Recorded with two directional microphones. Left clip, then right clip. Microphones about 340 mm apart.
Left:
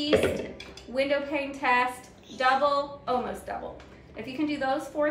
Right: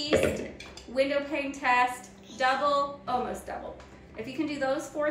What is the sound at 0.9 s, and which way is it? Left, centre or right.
A woman's voice, centre.